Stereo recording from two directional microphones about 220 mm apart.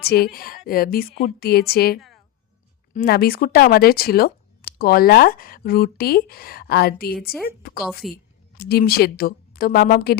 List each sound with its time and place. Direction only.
0.0 s a woman's voice: 45° left (ahead or behind)